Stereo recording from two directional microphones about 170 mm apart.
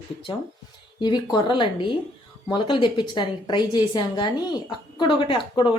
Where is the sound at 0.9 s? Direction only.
25° left (ahead or behind).